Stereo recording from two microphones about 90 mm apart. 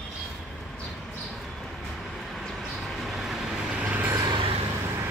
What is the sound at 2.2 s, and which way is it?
Vehicle, centre (ahead or behind).